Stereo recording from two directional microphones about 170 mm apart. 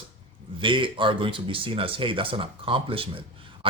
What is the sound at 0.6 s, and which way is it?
Speech, 30° right (ahead or behind).